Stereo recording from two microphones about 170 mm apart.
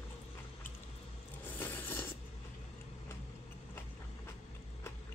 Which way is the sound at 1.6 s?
15° left (ahead or behind).